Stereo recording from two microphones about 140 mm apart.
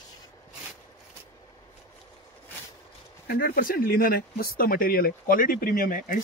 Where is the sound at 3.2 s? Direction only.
90° left.